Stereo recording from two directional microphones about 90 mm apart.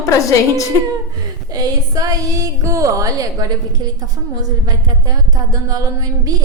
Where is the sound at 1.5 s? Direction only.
45° right (ahead or behind).